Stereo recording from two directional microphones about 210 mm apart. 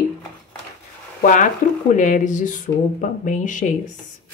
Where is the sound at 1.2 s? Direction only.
35° left (ahead or behind).